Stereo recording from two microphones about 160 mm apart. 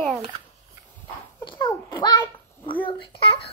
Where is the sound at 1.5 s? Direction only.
30° left (ahead or behind).